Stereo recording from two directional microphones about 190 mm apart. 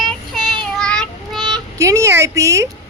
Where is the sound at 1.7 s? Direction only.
15° right (ahead or behind).